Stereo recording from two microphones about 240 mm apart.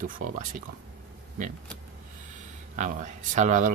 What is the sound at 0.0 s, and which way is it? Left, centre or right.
Speech, right.